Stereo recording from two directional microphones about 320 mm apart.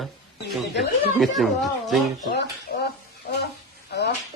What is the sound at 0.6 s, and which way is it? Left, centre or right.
Speech, left.